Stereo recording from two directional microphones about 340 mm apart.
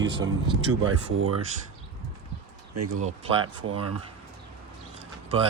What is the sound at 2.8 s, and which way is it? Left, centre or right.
Speech, right.